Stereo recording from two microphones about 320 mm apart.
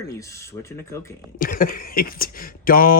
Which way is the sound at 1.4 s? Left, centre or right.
Left.